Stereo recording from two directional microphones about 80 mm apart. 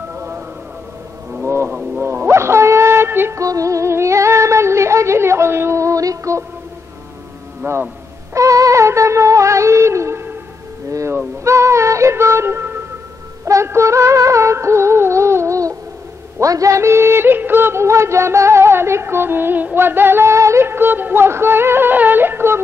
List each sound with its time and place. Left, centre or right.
1.4 s a sound: right
3.3 s female singing: right
7.6 s music: right
8.4 s music: right
10.9 s a sound: right
11.4 s synthetic singing: right
13.5 s music: right